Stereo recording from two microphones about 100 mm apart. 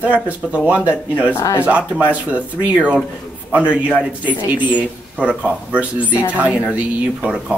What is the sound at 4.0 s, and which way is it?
Speech, 15° right (ahead or behind).